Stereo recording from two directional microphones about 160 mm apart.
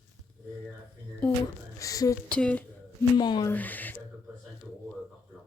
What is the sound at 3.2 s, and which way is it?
Speech, 25° left (ahead or behind).